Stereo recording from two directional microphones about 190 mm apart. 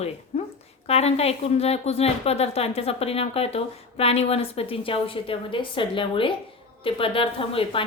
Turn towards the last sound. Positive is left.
turn(degrees=30)  # may be behind; listen again after turning